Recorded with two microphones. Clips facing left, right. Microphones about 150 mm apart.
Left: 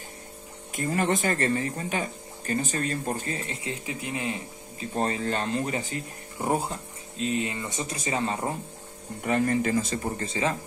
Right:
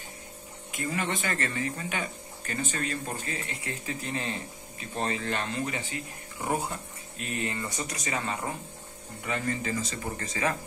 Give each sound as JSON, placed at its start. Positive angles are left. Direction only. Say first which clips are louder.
{"t": 0.7, "sound": "speech", "louder": "left 6 dB", "side_deg": 40}
{"t": 3.6, "sound": "speech", "louder": "left 2 dB", "side_deg": 15}
{"t": 4.7, "sound": "speech", "louder": "left 4 dB", "side_deg": 35}
{"t": 6.4, "sound": "speech", "louder": "left 3 dB", "side_deg": 25}
{"t": 9.2, "sound": "speech", "louder": "left 7 dB", "side_deg": 45}
{"t": 10.1, "sound": "speech", "louder": "right 1 dB", "side_deg": 25}